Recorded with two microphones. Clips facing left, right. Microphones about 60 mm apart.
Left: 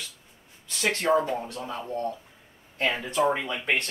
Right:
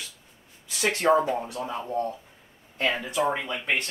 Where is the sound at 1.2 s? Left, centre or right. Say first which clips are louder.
Right 2 dB; centre.